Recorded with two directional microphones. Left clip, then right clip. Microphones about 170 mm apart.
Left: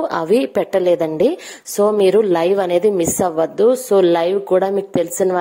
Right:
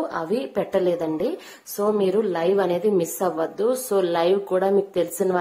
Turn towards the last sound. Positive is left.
turn(degrees=45)  # may be behind; listen again after turning